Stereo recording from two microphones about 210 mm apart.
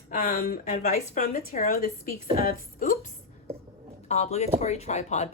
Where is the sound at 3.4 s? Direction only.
30° right (ahead or behind).